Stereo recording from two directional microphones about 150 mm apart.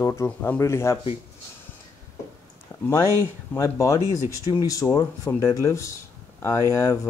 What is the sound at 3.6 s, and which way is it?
Speech, 20° left (ahead or behind).